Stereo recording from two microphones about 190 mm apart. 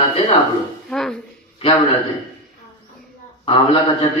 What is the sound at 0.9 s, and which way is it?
Speech, 5° left (ahead or behind).